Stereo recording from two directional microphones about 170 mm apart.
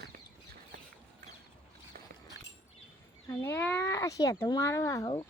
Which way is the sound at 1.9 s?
65° right (ahead or behind).